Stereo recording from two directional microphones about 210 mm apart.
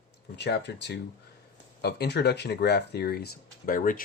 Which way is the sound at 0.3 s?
55° left (ahead or behind).